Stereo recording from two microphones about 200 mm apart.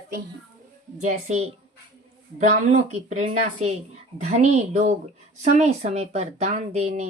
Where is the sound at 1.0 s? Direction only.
35° right (ahead or behind).